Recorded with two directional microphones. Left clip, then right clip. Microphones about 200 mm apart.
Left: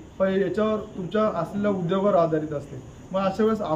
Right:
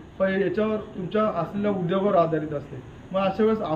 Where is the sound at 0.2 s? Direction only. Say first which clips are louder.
Left 1 dB; 15° left (ahead or behind).